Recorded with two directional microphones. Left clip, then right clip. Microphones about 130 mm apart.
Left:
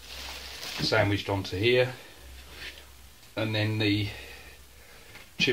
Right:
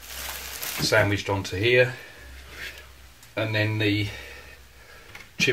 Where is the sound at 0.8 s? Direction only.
25° left (ahead or behind).